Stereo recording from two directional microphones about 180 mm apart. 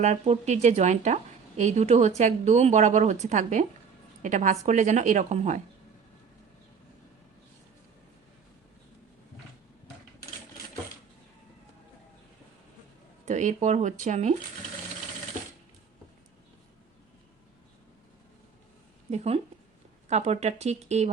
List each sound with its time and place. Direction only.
0.0 s a woman's voice: 40° right (ahead or behind)
13.2 s speech: 40° right (ahead or behind)
19.1 s speech: 35° right (ahead or behind)